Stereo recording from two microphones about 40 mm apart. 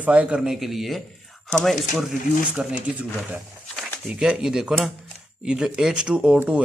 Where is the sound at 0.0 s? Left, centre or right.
Right.